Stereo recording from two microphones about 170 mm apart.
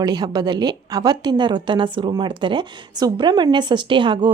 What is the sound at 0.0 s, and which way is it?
A woman's voice, 25° right (ahead or behind).